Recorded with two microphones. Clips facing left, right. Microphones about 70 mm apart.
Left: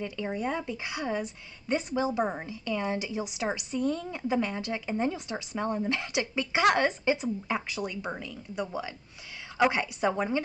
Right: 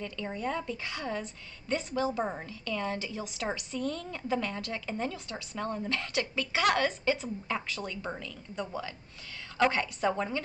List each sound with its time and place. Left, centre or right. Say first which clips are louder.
0.0 s a woman's voice: left 3 dB; centre